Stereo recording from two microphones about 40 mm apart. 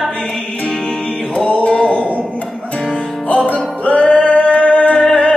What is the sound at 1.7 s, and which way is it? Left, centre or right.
Mantra, left.